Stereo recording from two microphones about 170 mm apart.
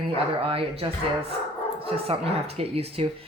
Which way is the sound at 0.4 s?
35° right (ahead or behind).